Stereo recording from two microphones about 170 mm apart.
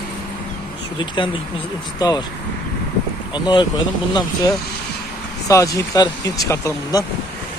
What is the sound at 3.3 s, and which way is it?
Speech, 25° left (ahead or behind).